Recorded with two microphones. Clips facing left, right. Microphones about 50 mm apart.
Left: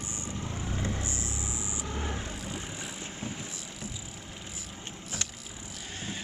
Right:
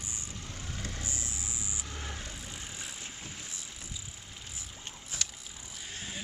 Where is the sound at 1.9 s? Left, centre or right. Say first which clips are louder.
Left 6 dB; centre.